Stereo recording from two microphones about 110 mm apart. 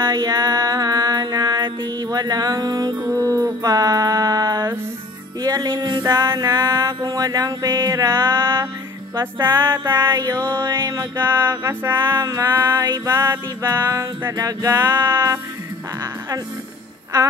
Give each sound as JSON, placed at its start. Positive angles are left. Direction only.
{"t": 0.0, "sound": "music", "side_deg": -35}
{"t": 5.4, "sound": "a sound", "side_deg": -35}
{"t": 9.2, "sound": "music", "side_deg": -25}